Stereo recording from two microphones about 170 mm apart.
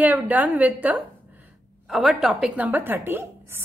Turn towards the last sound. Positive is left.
turn(degrees=-10)  # may be behind; listen again after turning